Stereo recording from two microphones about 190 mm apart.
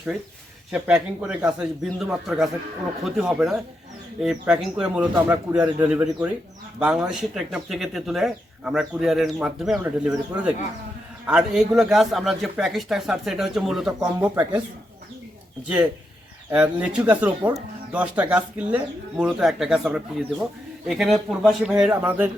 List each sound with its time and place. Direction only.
0.7 s speech: 5° right (ahead or behind)
16.5 s speech: 5° right (ahead or behind)